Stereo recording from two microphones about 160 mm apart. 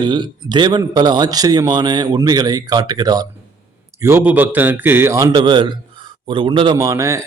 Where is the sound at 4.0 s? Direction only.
15° right (ahead or behind); by 6.7 s 30° right (ahead or behind).